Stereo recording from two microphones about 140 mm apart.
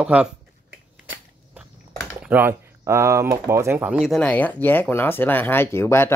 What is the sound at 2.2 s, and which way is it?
Speech, 15° right (ahead or behind).